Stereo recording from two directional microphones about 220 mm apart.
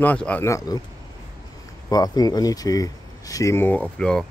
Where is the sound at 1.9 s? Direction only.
15° left (ahead or behind).